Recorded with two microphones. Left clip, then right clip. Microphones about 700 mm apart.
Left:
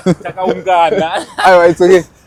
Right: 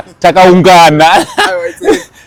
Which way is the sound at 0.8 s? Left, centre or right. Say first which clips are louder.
Right 8 dB; right.